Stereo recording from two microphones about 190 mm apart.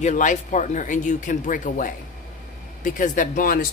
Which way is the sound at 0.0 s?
40° left (ahead or behind).